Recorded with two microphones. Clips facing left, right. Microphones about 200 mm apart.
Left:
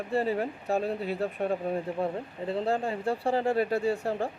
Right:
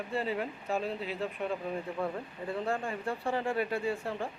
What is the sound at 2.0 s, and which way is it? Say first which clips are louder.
Speech: left 4 dB; 25° left (ahead or behind).